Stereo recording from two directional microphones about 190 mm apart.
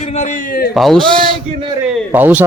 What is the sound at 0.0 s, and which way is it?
Speech, 35° left (ahead or behind).